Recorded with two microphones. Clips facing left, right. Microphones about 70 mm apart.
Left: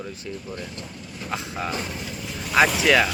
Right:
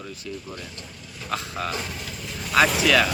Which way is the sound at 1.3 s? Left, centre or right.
Centre.